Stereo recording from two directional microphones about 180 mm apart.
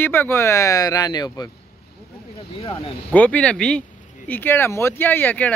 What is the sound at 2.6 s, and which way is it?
Speech, 30° left (ahead or behind).